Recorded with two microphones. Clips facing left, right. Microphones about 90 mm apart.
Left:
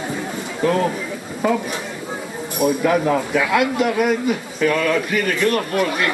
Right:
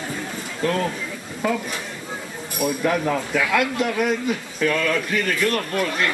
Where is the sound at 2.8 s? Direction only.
10° left (ahead or behind).